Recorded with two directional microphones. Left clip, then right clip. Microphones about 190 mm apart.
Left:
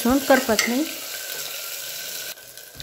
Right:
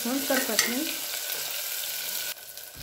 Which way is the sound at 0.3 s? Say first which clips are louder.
Left 10 dB; 55° left (ahead or behind).